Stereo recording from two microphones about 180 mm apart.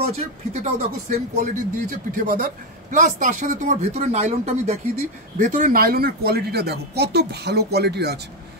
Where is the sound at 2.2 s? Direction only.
50° right (ahead or behind).